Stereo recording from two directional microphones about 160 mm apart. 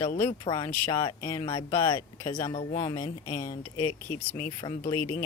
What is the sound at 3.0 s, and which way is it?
Speech, 25° left (ahead or behind).